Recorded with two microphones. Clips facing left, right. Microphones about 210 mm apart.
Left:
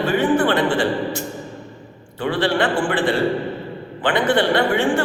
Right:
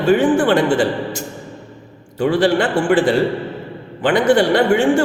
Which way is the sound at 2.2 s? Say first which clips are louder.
Right 5 dB; 45° right (ahead or behind).